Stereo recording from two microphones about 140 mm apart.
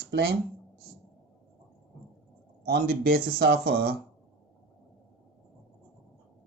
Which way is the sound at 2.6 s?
90° right.